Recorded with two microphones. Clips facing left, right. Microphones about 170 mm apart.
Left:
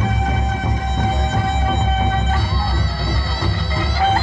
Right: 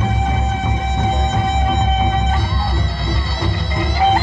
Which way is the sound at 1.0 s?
20° right (ahead or behind).